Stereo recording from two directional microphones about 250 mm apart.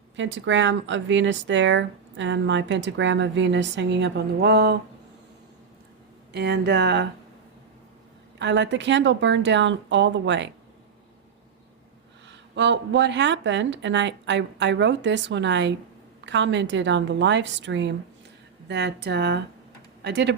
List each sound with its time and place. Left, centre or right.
0.2 s speech: right
6.3 s speech: right
8.4 s speech: right
12.3 s a woman's voice: right